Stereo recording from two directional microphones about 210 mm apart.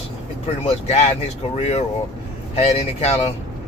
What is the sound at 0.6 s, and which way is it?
Speech, 30° left (ahead or behind).